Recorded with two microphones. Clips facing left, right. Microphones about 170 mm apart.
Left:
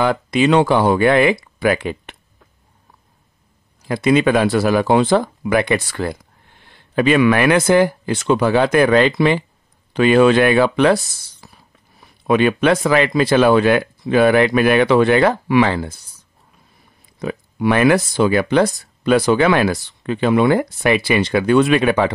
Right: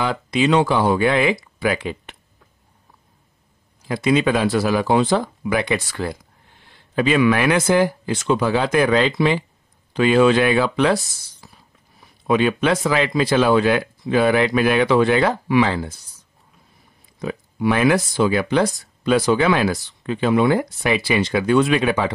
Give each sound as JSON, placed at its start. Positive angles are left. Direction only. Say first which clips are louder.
{"t": 0.0, "sound": "speech", "louder": "left 4 dB", "side_deg": 55}
{"t": 3.8, "sound": "speech", "louder": "left 3 dB", "side_deg": 60}
{"t": 11.4, "sound": "a sound", "louder": "left 2 dB", "side_deg": 65}
{"t": 12.3, "sound": "speech", "louder": "left 3 dB", "side_deg": 60}
{"t": 17.2, "sound": "speech", "louder": "left 2 dB", "side_deg": 65}